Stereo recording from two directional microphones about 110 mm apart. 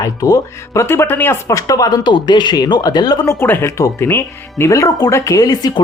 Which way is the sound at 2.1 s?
45° left (ahead or behind).